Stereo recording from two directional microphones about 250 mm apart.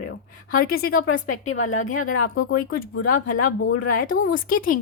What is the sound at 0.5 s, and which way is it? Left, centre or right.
A woman's voice, left.